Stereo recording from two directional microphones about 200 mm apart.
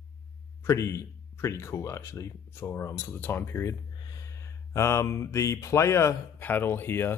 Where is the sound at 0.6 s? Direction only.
15° left (ahead or behind).